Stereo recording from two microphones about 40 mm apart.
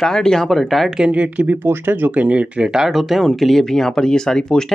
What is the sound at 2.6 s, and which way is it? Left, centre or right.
Speech, centre.